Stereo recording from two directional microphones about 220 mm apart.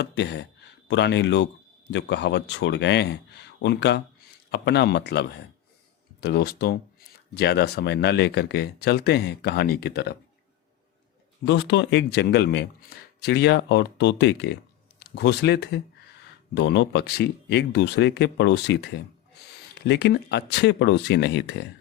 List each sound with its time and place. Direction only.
0.0 s speech: 50° left (ahead or behind)
11.4 s speech: 50° left (ahead or behind)
19.4 s a sound: 50° left (ahead or behind)
19.9 s speech: 50° left (ahead or behind)